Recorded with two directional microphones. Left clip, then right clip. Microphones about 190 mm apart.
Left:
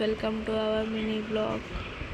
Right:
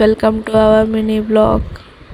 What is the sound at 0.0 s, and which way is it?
A woman's voice, 55° right (ahead or behind).